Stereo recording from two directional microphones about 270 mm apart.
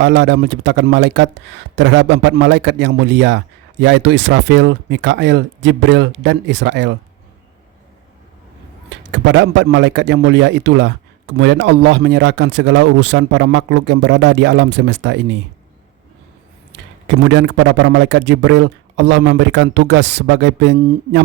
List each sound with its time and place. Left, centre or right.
0.0 s a man's voice: right
9.1 s a man's voice: right
17.1 s a man's voice: right